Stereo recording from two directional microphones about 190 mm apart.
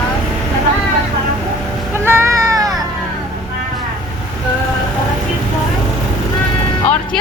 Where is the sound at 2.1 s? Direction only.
15° right (ahead or behind).